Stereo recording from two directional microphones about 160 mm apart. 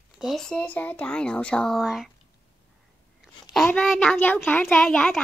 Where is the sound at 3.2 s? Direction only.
Centre (ahead or behind).